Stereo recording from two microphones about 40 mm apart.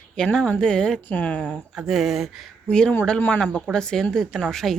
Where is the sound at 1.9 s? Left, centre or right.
Centre.